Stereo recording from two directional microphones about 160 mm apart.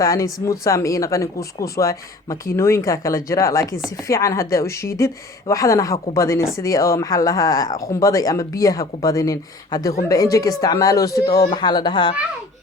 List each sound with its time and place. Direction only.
0.0 s a woman's voice: 20° left (ahead or behind)